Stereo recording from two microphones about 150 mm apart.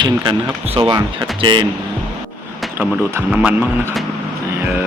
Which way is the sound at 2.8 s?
10° right (ahead or behind).